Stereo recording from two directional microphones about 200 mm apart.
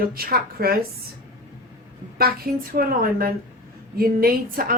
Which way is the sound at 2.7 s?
45° right (ahead or behind).